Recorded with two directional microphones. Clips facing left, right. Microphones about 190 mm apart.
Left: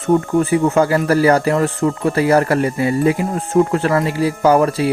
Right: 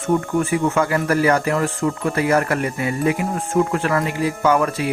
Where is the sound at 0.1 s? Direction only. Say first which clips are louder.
Left 5 dB; 30° left (ahead or behind).